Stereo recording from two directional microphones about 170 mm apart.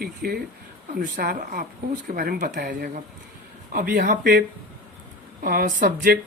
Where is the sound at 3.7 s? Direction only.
55° right (ahead or behind).